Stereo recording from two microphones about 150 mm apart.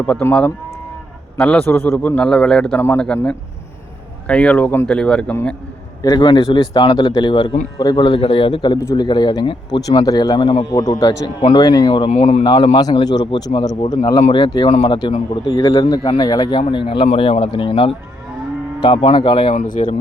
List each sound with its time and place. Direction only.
0.0 s a man's voice: 15° left (ahead or behind)
4.3 s a man's voice: 10° left (ahead or behind)
6.0 s speech: 30° left (ahead or behind)
8.8 s a man's voice: 20° left (ahead or behind)
9.0 s a man's voice: 30° left (ahead or behind)
12.1 s speech: 45° left (ahead or behind)
12.5 s a man's voice: 30° left (ahead or behind)
19.5 s speech: 60° left (ahead or behind)